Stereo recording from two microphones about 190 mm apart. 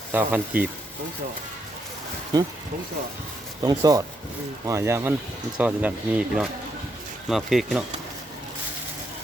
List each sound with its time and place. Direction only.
0.1 s speech: 10° right (ahead or behind)
3.6 s speech: 20° right (ahead or behind); by 7.9 s centre (ahead or behind)